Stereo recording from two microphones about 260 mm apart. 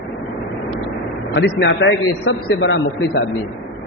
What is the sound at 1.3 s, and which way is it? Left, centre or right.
A man's voice, left.